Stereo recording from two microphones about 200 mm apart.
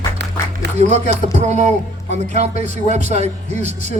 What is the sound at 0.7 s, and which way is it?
Speech, 35° right (ahead or behind).